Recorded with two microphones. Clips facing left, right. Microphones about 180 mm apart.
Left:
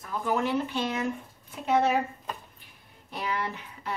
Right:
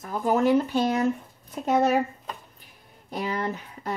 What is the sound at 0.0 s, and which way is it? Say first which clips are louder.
Speech: right 6 dB; 40° right (ahead or behind).